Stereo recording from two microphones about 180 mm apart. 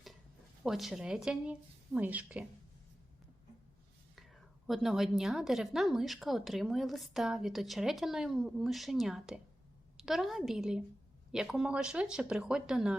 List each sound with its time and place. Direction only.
0.6 s a woman's voice: centre (ahead or behind)
4.6 s a woman's voice: centre (ahead or behind)